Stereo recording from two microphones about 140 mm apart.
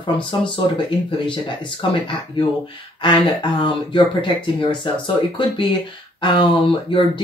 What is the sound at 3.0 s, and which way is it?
Speech, 35° left (ahead or behind).